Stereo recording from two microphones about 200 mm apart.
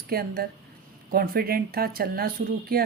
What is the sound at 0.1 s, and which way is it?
Speech, 50° right (ahead or behind).